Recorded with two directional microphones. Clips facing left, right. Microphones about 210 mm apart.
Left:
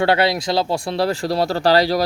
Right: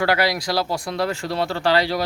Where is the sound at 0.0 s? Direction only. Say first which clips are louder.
Left 3 dB; 25° left (ahead or behind).